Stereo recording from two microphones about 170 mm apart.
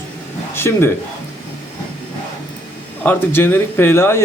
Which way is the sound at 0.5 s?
15° left (ahead or behind).